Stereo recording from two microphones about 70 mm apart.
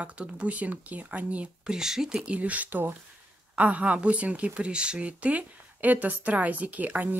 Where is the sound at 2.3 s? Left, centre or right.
Right.